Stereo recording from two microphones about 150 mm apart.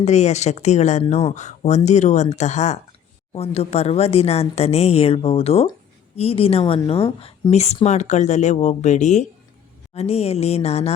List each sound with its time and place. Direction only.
0.0 s a woman's voice: 50° left (ahead or behind)